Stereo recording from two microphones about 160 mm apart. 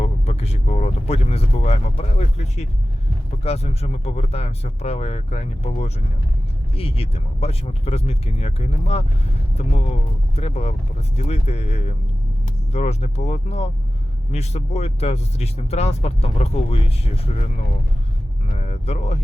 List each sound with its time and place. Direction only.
0.0 s speech: 45° left (ahead or behind)
18.5 s speech: 45° left (ahead or behind)